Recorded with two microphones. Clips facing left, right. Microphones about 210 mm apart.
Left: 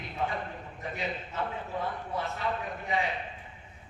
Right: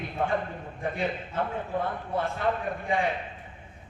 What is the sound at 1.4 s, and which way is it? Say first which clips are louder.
A man's voice: right 5 dB; 55° right (ahead or behind).